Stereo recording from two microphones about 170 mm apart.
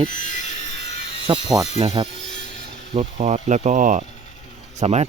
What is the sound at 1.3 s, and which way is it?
Speech, 30° right (ahead or behind).